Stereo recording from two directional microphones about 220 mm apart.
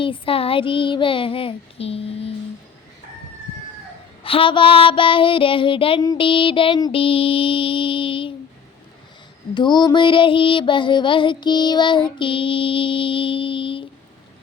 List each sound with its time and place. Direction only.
0.0 s child singing: 25° left (ahead or behind)
4.2 s child singing: 25° left (ahead or behind)
9.6 s child singing: 20° left (ahead or behind)